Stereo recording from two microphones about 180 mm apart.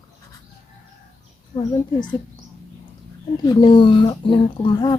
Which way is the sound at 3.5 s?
25° left (ahead or behind).